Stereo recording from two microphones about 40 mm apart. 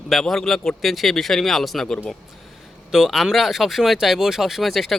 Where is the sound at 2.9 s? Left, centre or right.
Centre.